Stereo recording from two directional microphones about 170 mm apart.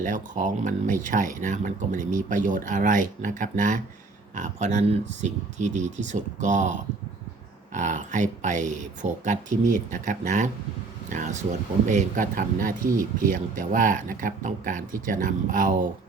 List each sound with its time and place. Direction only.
0.0 s speech: 50° right (ahead or behind)